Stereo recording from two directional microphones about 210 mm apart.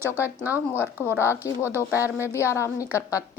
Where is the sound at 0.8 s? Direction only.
10° right (ahead or behind).